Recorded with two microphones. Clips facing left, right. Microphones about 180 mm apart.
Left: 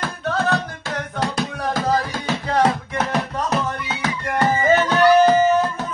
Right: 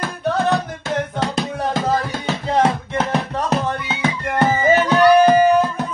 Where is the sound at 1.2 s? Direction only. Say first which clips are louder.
Right 2 dB; 25° right (ahead or behind).